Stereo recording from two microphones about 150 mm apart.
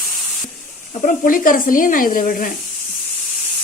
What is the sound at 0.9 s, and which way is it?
Speech, 55° left (ahead or behind).